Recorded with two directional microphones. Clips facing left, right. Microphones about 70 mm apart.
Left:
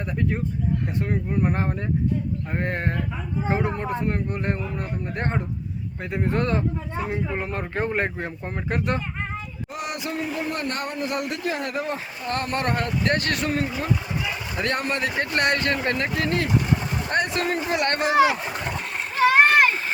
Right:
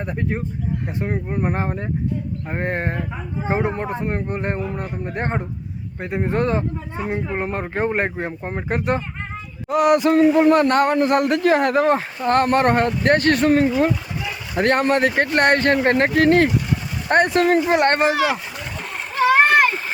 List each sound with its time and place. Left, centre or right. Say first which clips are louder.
0.0 s a man's voice: right 1 dB; right
1.5 s a man's voice: right 2 dB; centre
7.3 s a man's voice: right 4 dB; right
9.6 s speech: right 17 dB; right
12.8 s speech: right 6 dB; right
13.1 s speech: right 9 dB; right
14.5 s speech: right 10 dB; right
15.3 s speech: right 5 dB; right
15.9 s speech: right 9 dB; right
17.7 s speech: right 7 dB; right
18.1 s speech: left 2 dB; left
19.1 s splash: right 2 dB; centre